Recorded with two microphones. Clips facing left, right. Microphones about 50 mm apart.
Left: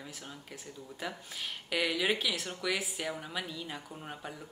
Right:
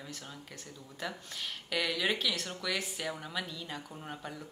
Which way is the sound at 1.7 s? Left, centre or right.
Centre.